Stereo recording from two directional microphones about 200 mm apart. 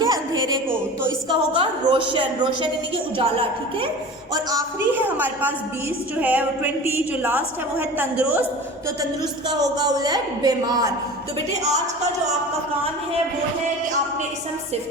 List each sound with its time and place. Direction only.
0.0 s a sound: 20° right (ahead or behind)
1.3 s a woman's voice: 25° right (ahead or behind)
4.5 s a woman's voice: 10° right (ahead or behind)
9.5 s a woman's voice: 20° right (ahead or behind)